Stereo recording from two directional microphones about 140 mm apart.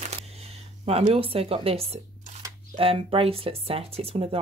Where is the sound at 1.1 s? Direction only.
45° right (ahead or behind).